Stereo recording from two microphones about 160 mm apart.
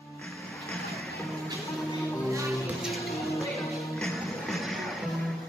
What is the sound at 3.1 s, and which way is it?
Music, 20° left (ahead or behind).